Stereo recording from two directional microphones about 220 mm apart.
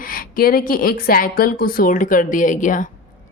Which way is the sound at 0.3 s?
40° left (ahead or behind).